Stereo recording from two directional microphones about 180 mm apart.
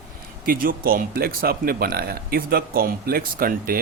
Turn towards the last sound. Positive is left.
turn(degrees=-55)  # may be behind; listen again after turning